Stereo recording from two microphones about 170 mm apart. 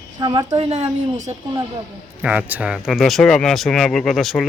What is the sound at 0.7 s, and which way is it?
Speech, 40° right (ahead or behind).